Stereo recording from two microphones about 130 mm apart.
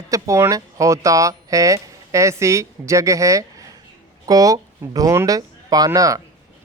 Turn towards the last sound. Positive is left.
turn(degrees=-25)  # may be behind; listen again after turning